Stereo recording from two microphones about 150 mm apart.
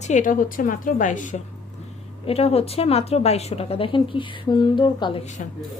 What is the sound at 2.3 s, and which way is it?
Speech, 40° left (ahead or behind).